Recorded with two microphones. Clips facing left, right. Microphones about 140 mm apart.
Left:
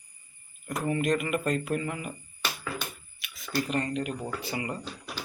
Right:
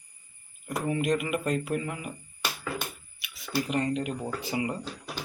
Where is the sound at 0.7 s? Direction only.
10° right (ahead or behind).